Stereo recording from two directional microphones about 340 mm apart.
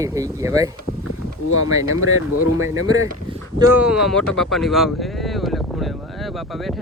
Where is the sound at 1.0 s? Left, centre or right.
Left.